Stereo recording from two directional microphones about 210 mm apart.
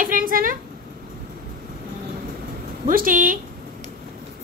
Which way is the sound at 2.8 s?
40° right (ahead or behind).